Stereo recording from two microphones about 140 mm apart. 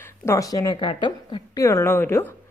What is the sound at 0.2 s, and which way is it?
A woman's voice, 20° left (ahead or behind).